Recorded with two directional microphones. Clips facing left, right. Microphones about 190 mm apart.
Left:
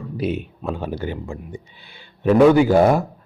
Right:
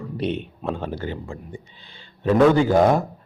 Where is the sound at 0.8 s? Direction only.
15° left (ahead or behind).